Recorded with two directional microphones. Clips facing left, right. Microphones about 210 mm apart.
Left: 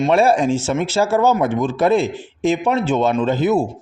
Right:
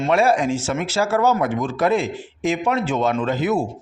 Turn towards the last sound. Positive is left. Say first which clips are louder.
# left 4 dB
turn(degrees=25)  # may be behind; listen again after turning